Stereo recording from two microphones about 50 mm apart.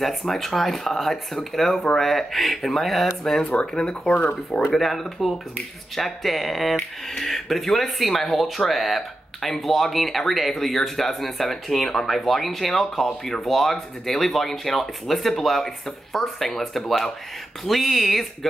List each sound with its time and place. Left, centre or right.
0.2 s speech: centre
3.4 s speech: centre
4.7 s speech: centre